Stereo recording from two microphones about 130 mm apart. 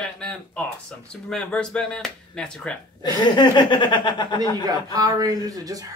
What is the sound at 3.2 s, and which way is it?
Chuckle, 35° left (ahead or behind).